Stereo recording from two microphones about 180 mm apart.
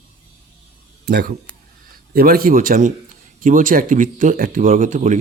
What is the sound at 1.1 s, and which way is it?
A man's voice, 60° right (ahead or behind).